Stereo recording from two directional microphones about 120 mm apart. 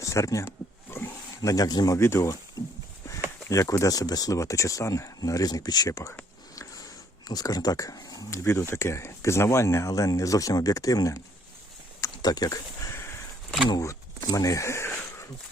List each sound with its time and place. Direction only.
0.0 s a sound: 25° left (ahead or behind)
1.4 s speech: 30° left (ahead or behind)
3.5 s speech: 25° left (ahead or behind)
7.3 s speech: 30° left (ahead or behind)
11.9 s a sound: 30° left (ahead or behind)
13.7 s speech: 30° left (ahead or behind)